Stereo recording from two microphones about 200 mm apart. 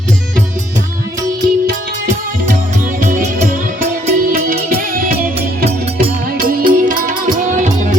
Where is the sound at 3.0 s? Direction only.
40° right (ahead or behind).